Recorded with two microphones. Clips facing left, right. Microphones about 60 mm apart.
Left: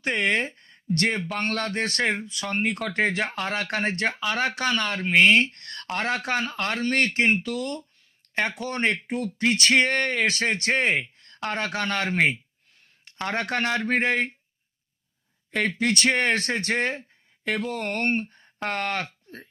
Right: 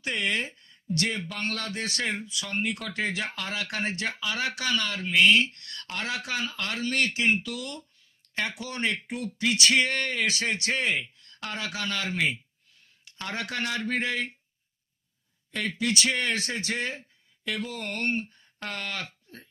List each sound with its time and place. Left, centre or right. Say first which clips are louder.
0.0 s speech: left 5 dB; left
15.5 s speech: left 4 dB; left